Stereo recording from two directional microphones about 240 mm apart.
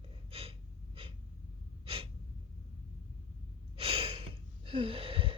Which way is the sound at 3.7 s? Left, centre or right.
Right.